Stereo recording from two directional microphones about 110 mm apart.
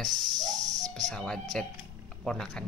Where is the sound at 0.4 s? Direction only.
35° right (ahead or behind).